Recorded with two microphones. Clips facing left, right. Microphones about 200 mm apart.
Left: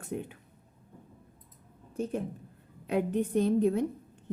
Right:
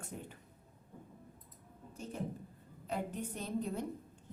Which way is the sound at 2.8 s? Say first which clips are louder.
Left 11 dB; 65° left (ahead or behind).